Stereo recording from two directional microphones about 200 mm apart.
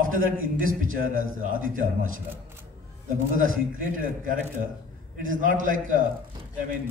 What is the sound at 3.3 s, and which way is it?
A man's voice, 40° right (ahead or behind).